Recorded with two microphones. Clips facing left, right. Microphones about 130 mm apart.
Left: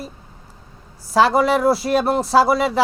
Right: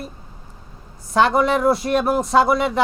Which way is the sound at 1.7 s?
5° left (ahead or behind).